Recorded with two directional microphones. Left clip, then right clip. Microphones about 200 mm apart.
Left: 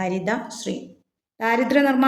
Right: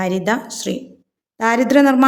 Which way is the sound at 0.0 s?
40° right (ahead or behind).